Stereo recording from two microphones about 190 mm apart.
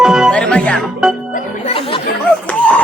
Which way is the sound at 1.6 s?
30° left (ahead or behind).